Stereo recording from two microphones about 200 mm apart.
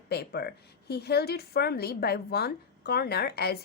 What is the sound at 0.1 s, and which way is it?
A woman's voice, 55° left (ahead or behind).